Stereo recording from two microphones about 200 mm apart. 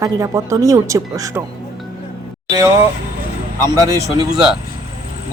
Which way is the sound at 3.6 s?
20° right (ahead or behind).